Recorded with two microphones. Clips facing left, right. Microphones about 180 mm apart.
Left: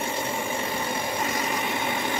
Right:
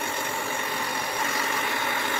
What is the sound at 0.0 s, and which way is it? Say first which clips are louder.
Vehicle: left 2 dB; 20° left (ahead or behind).